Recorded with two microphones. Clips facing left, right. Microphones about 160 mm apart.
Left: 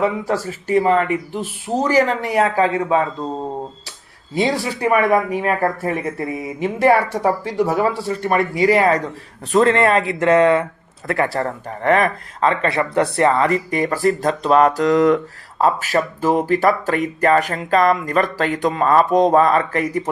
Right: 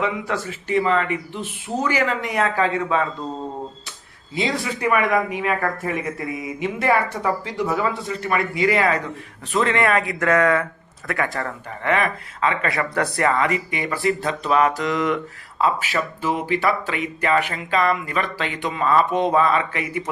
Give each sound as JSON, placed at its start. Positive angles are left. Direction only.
{"t": 0.0, "sound": "speech", "side_deg": 35}
{"t": 4.4, "sound": "speech", "side_deg": 40}